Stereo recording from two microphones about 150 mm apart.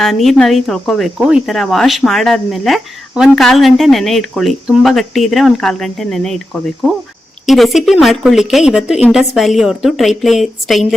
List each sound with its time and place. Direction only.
0.0 s speech: centre (ahead or behind)